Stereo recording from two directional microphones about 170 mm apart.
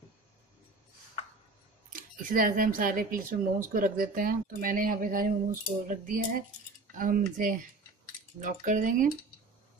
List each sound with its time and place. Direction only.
1.9 s speech: 55° right (ahead or behind)